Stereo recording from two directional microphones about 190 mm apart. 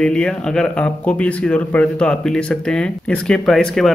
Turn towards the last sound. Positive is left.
turn(degrees=0)  # may be behind; listen again after turning